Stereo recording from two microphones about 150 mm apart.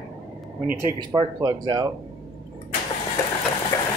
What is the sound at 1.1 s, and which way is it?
Speech, 30° right (ahead or behind).